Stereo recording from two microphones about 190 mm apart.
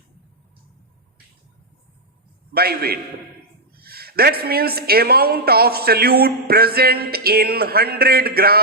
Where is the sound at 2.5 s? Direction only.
55° right (ahead or behind).